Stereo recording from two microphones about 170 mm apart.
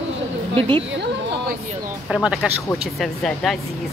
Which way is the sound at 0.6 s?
30° right (ahead or behind).